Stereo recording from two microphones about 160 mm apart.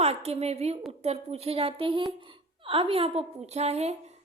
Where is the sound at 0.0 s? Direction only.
40° right (ahead or behind).